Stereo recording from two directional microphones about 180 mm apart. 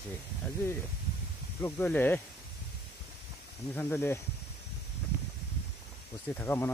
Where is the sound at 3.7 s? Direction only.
10° left (ahead or behind).